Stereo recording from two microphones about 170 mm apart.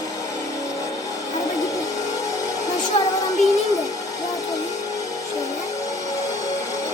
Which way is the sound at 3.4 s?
45° left (ahead or behind).